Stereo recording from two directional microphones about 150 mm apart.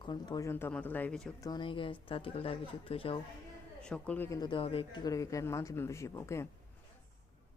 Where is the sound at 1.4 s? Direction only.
30° left (ahead or behind).